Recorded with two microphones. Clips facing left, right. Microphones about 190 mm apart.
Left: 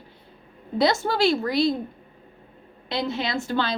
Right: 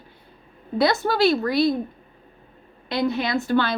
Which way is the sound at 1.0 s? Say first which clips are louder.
Right 2 dB; 20° left (ahead or behind).